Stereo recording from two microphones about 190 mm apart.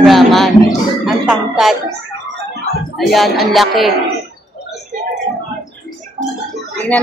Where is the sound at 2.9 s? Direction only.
Centre (ahead or behind).